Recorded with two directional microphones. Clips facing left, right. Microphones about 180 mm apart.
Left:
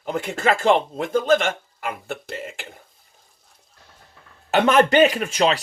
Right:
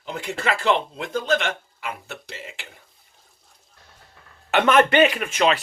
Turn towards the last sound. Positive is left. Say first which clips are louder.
# left 1 dB
turn(degrees=40)  # may be behind; listen again after turning